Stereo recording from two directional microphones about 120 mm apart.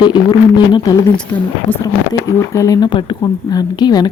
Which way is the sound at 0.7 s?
30° left (ahead or behind).